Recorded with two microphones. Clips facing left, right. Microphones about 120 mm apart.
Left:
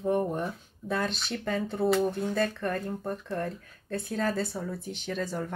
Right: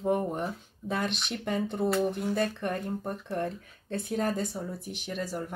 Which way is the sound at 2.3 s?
20° right (ahead or behind).